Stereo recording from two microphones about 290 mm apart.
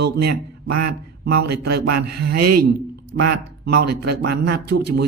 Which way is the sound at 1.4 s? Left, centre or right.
Right.